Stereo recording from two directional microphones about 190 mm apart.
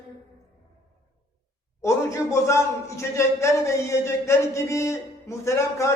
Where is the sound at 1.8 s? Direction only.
15° left (ahead or behind).